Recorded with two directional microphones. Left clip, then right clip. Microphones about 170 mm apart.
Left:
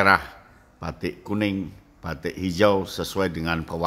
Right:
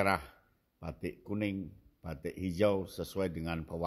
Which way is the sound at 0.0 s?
20° right (ahead or behind).